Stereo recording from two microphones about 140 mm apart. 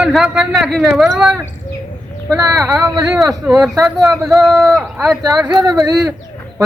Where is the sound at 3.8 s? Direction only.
Centre (ahead or behind).